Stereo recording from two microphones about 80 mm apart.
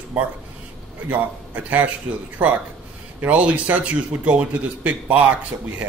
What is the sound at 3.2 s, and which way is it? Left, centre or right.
Speech, centre.